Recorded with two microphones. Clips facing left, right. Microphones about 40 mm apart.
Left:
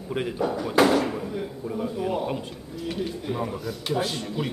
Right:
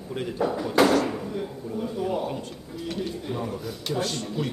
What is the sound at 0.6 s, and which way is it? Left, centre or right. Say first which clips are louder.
Speech: even; centre.